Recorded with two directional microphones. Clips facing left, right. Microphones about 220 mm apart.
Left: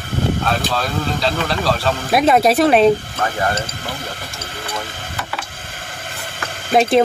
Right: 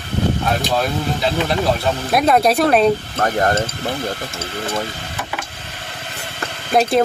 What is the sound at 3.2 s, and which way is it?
Speech, 40° right (ahead or behind).